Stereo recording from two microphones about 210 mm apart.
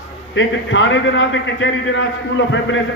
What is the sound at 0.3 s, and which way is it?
A man's voice, 60° left (ahead or behind).